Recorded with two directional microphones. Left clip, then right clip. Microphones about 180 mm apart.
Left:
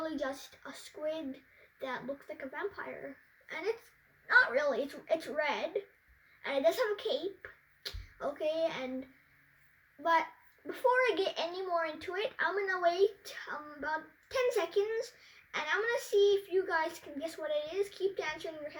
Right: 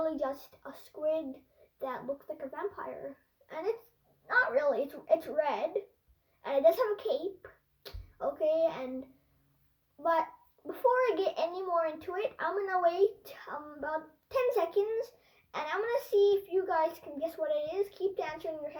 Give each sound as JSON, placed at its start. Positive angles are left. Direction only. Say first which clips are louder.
{"t": 0.0, "sound": "a child's voice", "louder": "right 4 dB", "side_deg": 15}
{"t": 10.0, "sound": "a child's voice", "louder": "even", "side_deg": 15}